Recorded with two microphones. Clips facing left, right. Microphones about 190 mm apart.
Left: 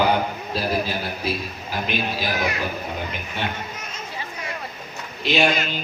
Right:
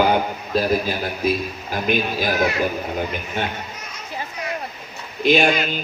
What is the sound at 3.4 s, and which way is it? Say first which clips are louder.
Speech: right 2 dB; 50° right (ahead or behind).